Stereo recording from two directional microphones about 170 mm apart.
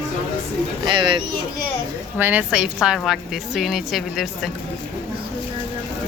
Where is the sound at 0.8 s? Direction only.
30° right (ahead or behind).